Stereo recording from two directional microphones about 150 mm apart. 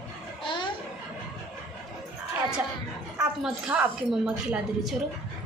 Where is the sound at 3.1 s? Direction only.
5° right (ahead or behind).